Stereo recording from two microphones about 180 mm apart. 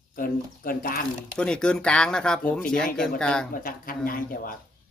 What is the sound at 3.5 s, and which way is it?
Speech, 50° left (ahead or behind).